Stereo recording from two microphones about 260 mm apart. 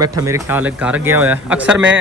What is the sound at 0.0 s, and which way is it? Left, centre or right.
Speech, centre.